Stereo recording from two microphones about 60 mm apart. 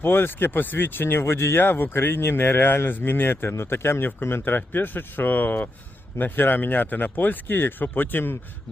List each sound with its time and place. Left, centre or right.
0.0 s speech: left